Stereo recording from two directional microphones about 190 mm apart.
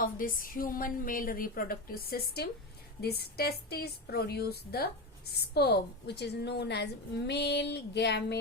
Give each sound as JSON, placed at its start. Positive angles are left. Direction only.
{"t": 0.0, "sound": "a woman's voice", "side_deg": 45}